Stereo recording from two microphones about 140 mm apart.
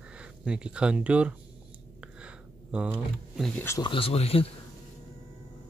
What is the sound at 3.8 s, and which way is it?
Speech, 40° left (ahead or behind).